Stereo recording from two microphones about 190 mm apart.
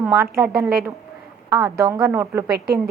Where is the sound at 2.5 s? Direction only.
55° right (ahead or behind).